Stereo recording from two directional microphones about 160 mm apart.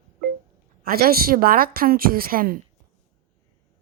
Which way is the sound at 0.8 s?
70° right (ahead or behind).